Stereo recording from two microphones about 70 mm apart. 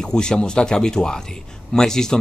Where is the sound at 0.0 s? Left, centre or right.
Centre.